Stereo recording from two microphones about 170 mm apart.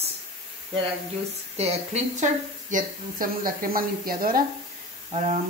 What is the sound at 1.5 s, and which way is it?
Speech, 40° right (ahead or behind).